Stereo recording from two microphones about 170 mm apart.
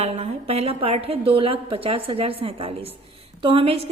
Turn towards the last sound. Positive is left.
turn(degrees=-35)  # may be behind; listen again after turning